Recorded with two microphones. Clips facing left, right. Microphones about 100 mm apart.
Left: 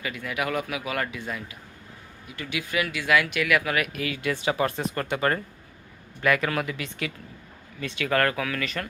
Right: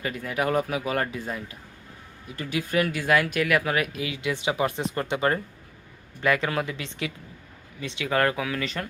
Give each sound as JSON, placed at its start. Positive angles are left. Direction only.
{"t": 0.0, "sound": "speech", "side_deg": -35}